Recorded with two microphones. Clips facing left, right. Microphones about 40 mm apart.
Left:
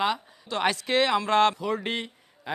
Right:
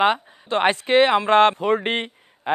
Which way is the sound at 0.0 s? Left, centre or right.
Right.